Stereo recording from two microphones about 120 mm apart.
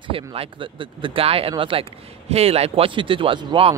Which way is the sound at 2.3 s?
60° right (ahead or behind).